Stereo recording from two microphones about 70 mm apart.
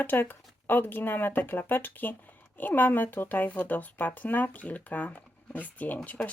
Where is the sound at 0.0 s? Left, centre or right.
Left.